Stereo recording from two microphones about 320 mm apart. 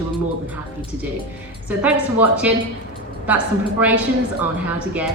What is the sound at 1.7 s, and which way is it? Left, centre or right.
Speech, centre.